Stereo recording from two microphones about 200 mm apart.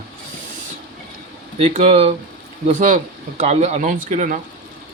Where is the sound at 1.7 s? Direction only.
30° right (ahead or behind).